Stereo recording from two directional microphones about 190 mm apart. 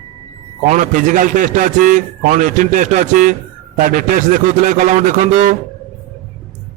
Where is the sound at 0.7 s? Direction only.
40° right (ahead or behind).